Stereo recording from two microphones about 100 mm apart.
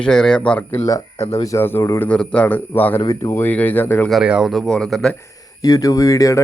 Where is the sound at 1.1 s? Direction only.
90° left.